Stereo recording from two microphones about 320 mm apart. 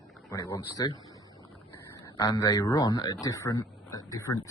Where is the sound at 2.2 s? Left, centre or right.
Centre.